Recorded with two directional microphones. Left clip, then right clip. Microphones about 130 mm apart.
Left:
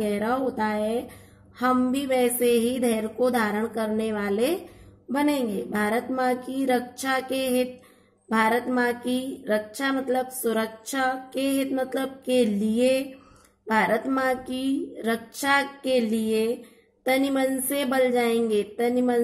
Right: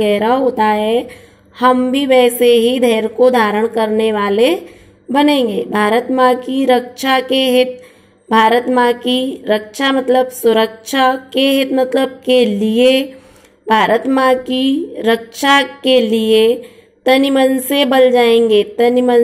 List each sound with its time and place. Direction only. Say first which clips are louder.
0.0 s a woman's voice: right 13 dB; 25° right (ahead or behind)